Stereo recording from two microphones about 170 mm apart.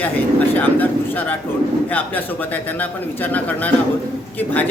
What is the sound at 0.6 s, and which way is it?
A woman's voice, 10° left (ahead or behind).